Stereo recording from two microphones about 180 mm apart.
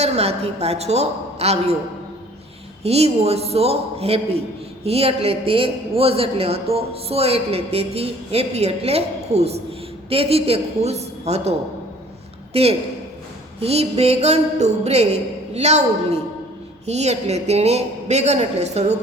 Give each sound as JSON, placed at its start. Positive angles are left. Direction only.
{"t": 0.0, "sound": "a man's voice", "side_deg": -35}
{"t": 2.8, "sound": "a man's voice", "side_deg": -35}
{"t": 12.5, "sound": "a man's voice", "side_deg": -35}